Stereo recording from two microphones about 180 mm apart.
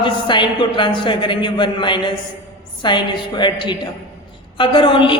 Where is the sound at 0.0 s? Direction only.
25° left (ahead or behind).